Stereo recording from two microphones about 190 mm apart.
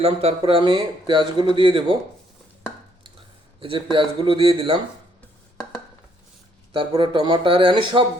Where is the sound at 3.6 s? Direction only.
25° right (ahead or behind).